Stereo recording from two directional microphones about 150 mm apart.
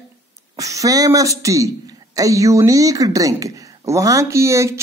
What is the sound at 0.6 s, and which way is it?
Speech, 20° right (ahead or behind).